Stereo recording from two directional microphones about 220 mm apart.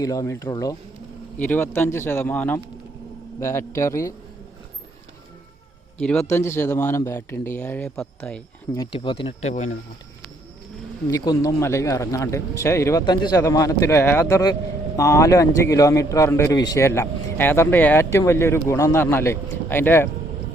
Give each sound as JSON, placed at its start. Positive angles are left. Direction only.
{"t": 0.0, "sound": "a man's voice", "side_deg": 15}
{"t": 6.0, "sound": "a man's voice", "side_deg": 5}
{"t": 8.7, "sound": "speech", "side_deg": 20}
{"t": 11.1, "sound": "a man's voice", "side_deg": 15}